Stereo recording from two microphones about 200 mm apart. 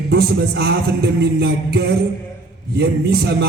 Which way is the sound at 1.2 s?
55° right (ahead or behind).